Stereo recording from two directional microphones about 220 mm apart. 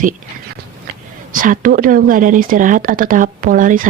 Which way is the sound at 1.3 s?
40° right (ahead or behind).